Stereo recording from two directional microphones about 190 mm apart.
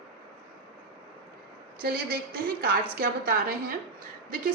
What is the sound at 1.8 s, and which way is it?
A woman's voice, 50° right (ahead or behind).